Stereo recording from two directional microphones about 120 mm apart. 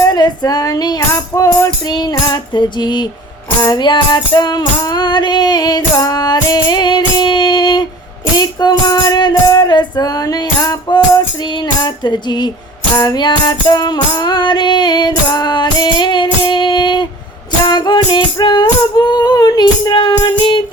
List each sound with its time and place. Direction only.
0.0 s music: 35° left (ahead or behind)